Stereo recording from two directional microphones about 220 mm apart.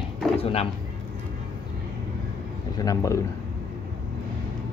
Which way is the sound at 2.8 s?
15° left (ahead or behind).